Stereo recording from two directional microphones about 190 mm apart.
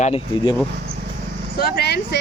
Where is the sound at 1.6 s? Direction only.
60° left (ahead or behind).